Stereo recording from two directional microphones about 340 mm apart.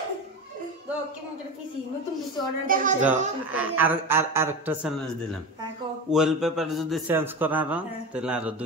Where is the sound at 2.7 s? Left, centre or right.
Right.